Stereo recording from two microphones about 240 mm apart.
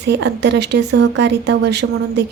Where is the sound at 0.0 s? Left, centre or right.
Right.